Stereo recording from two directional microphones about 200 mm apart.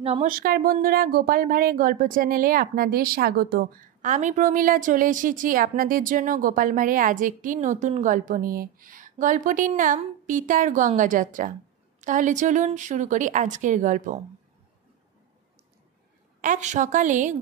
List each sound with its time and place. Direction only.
0.0 s speech: 30° right (ahead or behind)
0.3 s a woman's voice: 45° right (ahead or behind)
16.3 s a woman's voice: 35° right (ahead or behind)